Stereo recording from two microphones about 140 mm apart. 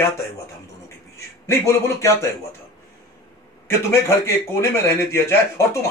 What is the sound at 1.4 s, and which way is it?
A man's voice, 15° left (ahead or behind).